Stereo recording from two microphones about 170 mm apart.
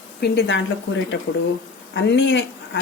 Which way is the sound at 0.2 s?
80° left.